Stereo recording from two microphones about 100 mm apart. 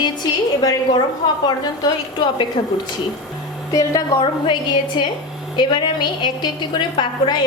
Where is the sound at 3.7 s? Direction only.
35° left (ahead or behind).